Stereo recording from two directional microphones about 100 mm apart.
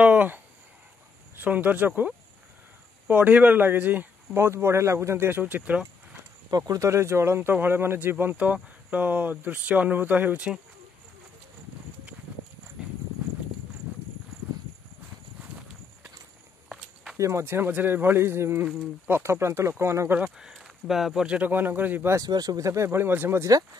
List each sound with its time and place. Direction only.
0.0 s a sound: 15° right (ahead or behind)
1.4 s speech: 15° right (ahead or behind)
6.5 s speech: 35° right (ahead or behind); by 10.6 s 10° right (ahead or behind)
12.8 s horse: 5° right (ahead or behind)
16.6 s walk: centre (ahead or behind)
17.2 s speech: 30° right (ahead or behind)
20.2 s speech: 5° right (ahead or behind); by 22.1 s 20° right (ahead or behind)
22.1 s speech: 40° right (ahead or behind)